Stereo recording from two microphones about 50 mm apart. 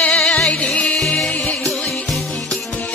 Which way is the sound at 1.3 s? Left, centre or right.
Left.